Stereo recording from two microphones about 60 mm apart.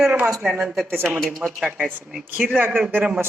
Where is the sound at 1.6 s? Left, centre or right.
Centre.